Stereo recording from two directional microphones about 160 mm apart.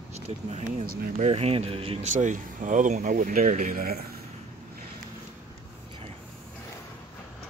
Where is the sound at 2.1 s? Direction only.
50° right (ahead or behind).